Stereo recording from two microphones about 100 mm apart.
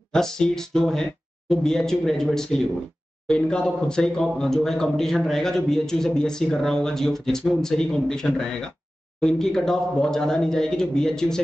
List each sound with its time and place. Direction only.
0.1 s speech: 5° left (ahead or behind)